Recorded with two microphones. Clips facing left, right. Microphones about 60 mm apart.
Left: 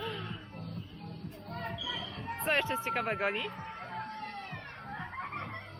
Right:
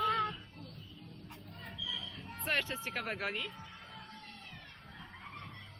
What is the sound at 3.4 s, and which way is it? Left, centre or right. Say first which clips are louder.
Music: left 8 dB; left.